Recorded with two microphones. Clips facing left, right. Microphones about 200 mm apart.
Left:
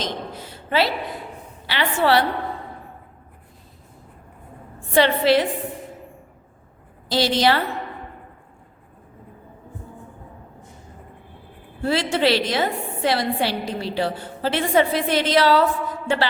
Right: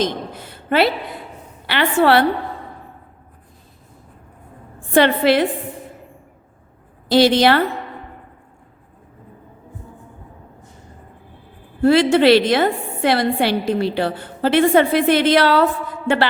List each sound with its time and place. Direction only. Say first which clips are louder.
0.0 s a sound: right 7 dB; 55° right (ahead or behind)
1.6 s a woman's voice: right 5 dB; 60° right (ahead or behind)
4.9 s a woman's voice: right 3 dB; 55° right (ahead or behind)
7.1 s a woman's voice: right 6 dB; 60° right (ahead or behind)
11.8 s a woman's voice: right 8 dB; 55° right (ahead or behind)